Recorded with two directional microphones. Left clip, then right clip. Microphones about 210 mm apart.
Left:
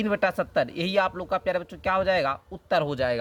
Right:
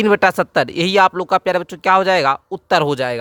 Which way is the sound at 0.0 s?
45° right (ahead or behind).